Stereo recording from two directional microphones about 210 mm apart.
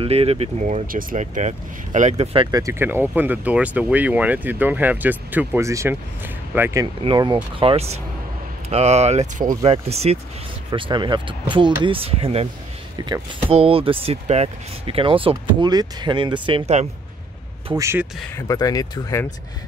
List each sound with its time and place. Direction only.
0.0 s speech: 30° right (ahead or behind); by 6.9 s 10° right (ahead or behind)
7.0 s speech: 25° right (ahead or behind)
17.7 s speech: 15° right (ahead or behind)
18.3 s speech: 15° left (ahead or behind)